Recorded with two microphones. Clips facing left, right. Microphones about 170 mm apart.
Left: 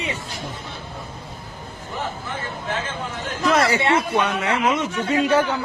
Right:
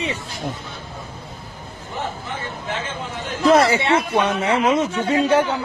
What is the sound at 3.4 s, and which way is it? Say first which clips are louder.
Speech: right 4 dB; 30° right (ahead or behind).